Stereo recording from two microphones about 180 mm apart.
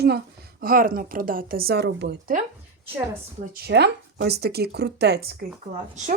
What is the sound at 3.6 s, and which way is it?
Speech, 65° right (ahead or behind).